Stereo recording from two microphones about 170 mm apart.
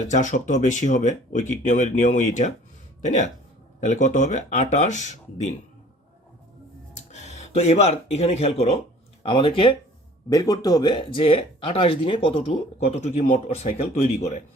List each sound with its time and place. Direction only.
0.1 s speech: 45° left (ahead or behind)
3.8 s speech: 45° left (ahead or behind)
7.1 s speech: 40° left (ahead or behind)